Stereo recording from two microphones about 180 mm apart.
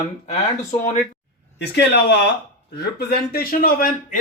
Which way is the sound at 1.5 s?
70° left (ahead or behind).